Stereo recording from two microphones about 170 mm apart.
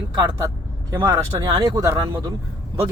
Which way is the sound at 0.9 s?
20° right (ahead or behind).